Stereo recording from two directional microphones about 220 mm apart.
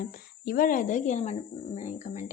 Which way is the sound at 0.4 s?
40° left (ahead or behind).